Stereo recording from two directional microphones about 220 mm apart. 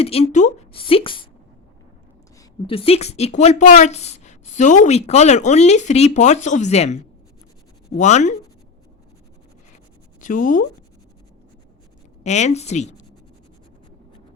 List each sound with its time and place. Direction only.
0.0 s a woman's voice: 25° left (ahead or behind)
2.6 s speech: 25° left (ahead or behind)
10.2 s speech: 35° left (ahead or behind)
12.2 s speech: 30° left (ahead or behind)